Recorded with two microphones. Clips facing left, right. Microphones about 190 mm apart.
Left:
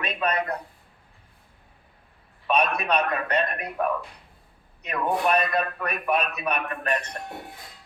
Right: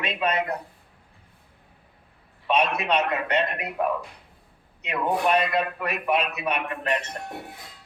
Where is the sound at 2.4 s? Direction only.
25° right (ahead or behind).